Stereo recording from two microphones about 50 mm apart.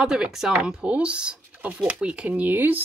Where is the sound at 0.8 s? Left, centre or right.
Right.